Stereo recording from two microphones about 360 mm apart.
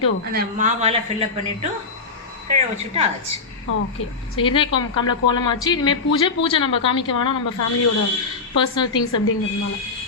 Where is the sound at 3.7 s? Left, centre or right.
Left.